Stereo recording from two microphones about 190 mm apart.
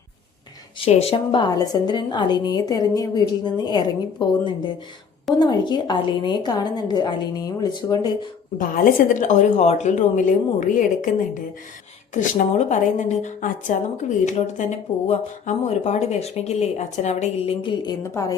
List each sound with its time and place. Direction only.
0.9 s a woman's voice: 35° left (ahead or behind)
8.5 s a woman's voice: 50° left (ahead or behind); by 18.3 s 15° left (ahead or behind)